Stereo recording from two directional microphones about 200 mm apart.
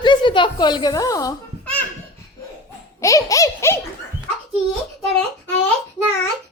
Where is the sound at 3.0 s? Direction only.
15° left (ahead or behind).